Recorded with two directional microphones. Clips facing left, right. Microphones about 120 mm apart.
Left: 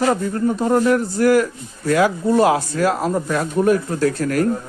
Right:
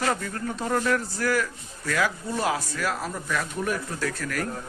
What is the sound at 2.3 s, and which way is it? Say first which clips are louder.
Speech: left 12 dB; 70° left (ahead or behind).